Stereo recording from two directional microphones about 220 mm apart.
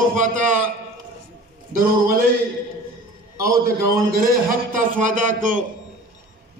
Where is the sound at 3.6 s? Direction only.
45° right (ahead or behind).